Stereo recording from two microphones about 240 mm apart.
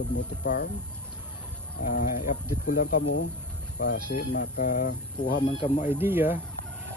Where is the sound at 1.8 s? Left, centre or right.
Left.